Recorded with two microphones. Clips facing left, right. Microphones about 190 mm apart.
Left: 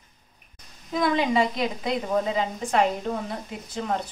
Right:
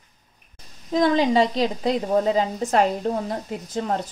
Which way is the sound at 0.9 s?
35° right (ahead or behind).